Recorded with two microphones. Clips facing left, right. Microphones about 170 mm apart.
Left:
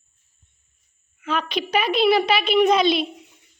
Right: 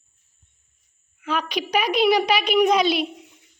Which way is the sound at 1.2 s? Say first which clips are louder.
Left 1 dB; 10° right (ahead or behind).